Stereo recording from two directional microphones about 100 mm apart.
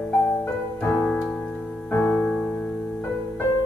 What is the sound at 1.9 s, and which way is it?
Music, 15° left (ahead or behind).